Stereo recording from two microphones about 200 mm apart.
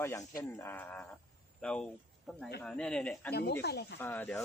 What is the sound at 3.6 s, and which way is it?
Speech, 55° left (ahead or behind).